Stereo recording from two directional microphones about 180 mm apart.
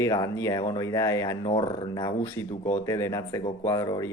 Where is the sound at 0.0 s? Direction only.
15° left (ahead or behind).